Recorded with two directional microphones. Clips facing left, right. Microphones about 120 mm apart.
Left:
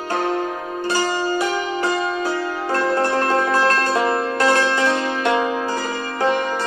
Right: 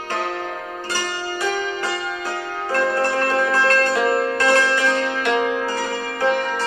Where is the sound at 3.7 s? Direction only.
25° left (ahead or behind).